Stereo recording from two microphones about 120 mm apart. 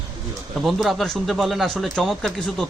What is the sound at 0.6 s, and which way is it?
A man's voice, centre (ahead or behind).